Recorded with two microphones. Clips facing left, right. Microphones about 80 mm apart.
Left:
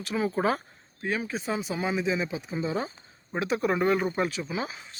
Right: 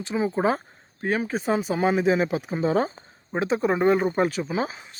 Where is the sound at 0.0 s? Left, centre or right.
Right.